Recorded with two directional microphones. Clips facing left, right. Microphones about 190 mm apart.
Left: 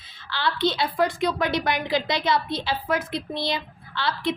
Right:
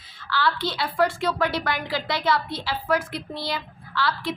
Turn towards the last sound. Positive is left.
turn(degrees=25)  # may be behind; listen again after turning